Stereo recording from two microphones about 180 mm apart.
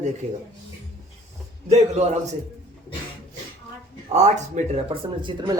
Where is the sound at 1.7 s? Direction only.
40° right (ahead or behind).